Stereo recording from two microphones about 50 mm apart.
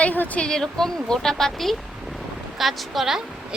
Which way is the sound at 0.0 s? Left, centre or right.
Left.